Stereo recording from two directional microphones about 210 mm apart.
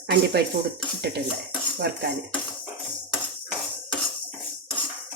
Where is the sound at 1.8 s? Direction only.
55° right (ahead or behind).